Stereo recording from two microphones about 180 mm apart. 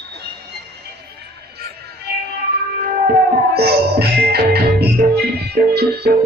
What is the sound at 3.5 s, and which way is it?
Music, 65° right (ahead or behind).